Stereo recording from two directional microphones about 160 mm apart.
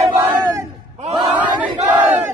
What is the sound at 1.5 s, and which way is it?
Battle cry, 10° right (ahead or behind).